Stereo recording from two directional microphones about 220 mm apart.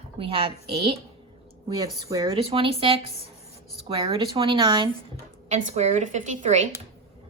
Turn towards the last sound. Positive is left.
turn(degrees=-35)  # may be behind; listen again after turning